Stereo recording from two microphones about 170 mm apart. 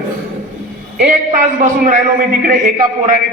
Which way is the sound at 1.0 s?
50° right (ahead or behind).